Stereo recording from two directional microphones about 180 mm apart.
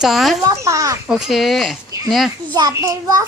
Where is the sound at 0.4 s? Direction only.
15° right (ahead or behind).